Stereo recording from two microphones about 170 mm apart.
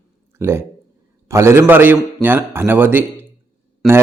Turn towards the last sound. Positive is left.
turn(degrees=0)  # may be behind; listen again after turning